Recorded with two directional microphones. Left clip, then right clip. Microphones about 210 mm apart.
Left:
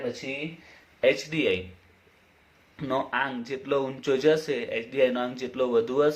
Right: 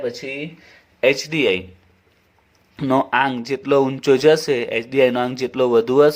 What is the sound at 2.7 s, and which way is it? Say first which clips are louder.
Speech: right 10 dB; 45° right (ahead or behind).